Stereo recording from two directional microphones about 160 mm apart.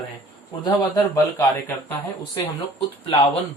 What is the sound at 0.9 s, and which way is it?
Speech, 20° left (ahead or behind).